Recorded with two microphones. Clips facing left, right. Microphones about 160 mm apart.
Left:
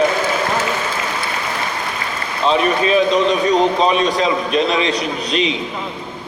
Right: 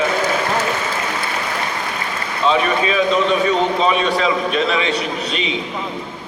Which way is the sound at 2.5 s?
35° left (ahead or behind).